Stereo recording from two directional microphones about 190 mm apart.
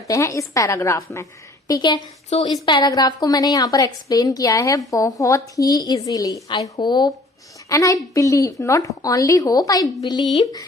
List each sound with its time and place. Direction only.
0.1 s a woman's voice: 15° left (ahead or behind)